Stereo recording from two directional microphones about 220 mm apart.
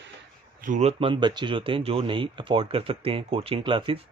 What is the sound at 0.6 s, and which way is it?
Speech, 35° right (ahead or behind).